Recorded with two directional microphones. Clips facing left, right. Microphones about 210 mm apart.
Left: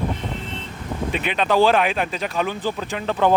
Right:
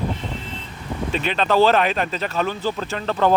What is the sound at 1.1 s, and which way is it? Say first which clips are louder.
Speech: right 1 dB; 10° left (ahead or behind).